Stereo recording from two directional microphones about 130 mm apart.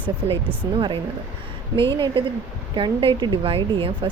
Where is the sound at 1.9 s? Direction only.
35° right (ahead or behind).